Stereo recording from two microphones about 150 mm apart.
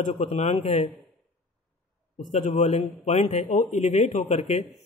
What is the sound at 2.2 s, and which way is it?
A man's voice, 55° left (ahead or behind).